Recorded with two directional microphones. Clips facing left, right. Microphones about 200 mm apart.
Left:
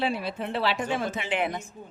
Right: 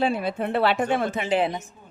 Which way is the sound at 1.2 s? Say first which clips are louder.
Right 6 dB; 35° right (ahead or behind).